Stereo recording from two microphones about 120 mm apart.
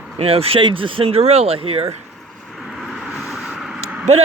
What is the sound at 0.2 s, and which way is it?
Speech, 55° right (ahead or behind).